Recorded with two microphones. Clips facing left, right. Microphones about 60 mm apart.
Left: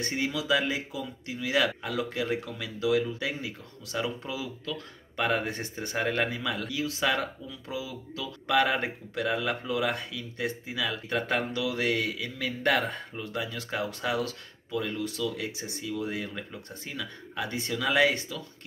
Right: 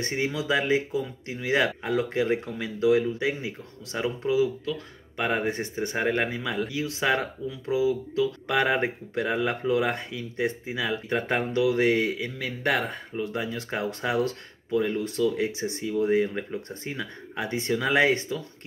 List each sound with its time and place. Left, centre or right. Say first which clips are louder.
0.0 s speech: right 3 dB; right